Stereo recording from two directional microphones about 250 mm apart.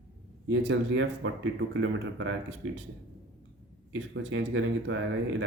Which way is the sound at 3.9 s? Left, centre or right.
Right.